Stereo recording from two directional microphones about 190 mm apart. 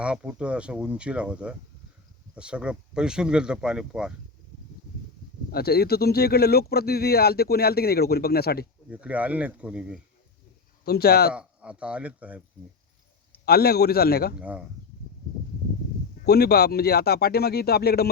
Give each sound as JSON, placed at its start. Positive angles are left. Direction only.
{"t": 0.0, "sound": "speech", "side_deg": -5}
{"t": 5.5, "sound": "speech", "side_deg": 55}
{"t": 8.9, "sound": "speech", "side_deg": -5}
{"t": 10.8, "sound": "speech", "side_deg": 55}
{"t": 11.3, "sound": "speech", "side_deg": -5}
{"t": 13.4, "sound": "speech", "side_deg": 55}
{"t": 14.3, "sound": "speech", "side_deg": -5}
{"t": 16.2, "sound": "speech", "side_deg": 55}